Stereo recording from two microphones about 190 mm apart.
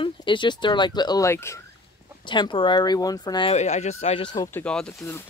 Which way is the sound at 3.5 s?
35° left (ahead or behind).